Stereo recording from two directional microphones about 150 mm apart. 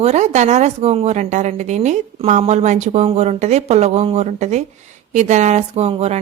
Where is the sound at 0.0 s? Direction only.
50° right (ahead or behind).